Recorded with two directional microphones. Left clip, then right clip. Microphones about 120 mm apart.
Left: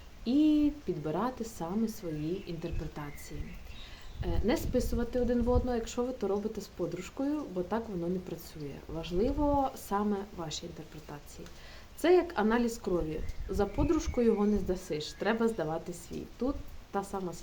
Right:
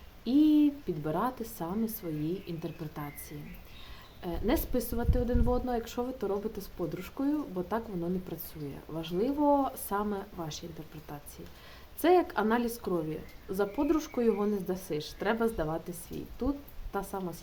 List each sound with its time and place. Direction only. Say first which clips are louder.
0.3 s a woman's voice: right 2 dB; 20° right (ahead or behind)
4.2 s a woman's voice: right 1 dB; 20° right (ahead or behind)
12.0 s a woman's voice: right 1 dB; 20° right (ahead or behind)